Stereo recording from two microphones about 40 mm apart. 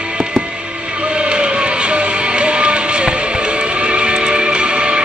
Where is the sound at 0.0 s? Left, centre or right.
Right.